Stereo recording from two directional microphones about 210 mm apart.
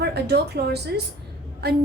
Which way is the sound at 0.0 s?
50° right (ahead or behind).